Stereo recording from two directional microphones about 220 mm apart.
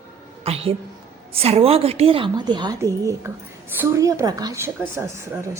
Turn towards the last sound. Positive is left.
turn(degrees=-10)  # may be behind; listen again after turning